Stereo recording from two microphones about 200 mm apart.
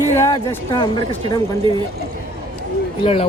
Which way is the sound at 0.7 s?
20° left (ahead or behind).